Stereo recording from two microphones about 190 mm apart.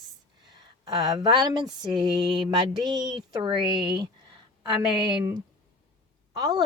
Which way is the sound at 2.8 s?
20° right (ahead or behind).